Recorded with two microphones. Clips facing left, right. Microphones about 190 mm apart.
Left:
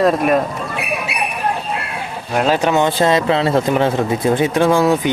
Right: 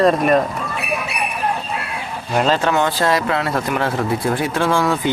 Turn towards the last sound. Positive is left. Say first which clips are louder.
# left 4 dB
turn(degrees=20)  # may be behind; listen again after turning